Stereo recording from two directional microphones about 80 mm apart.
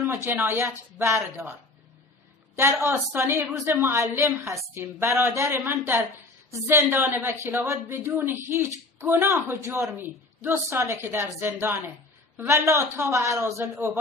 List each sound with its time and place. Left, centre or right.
0.0 s a man's voice: right
2.5 s a man's voice: right